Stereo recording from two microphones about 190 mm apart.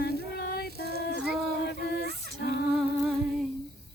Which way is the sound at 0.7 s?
55° right (ahead or behind).